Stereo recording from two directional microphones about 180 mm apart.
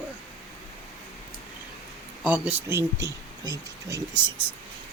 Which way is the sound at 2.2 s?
10° right (ahead or behind).